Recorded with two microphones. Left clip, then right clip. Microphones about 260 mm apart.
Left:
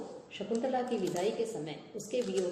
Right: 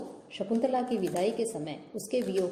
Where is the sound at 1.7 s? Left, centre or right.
Right.